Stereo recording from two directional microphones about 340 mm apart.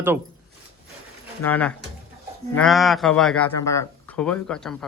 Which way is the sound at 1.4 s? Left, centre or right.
Centre.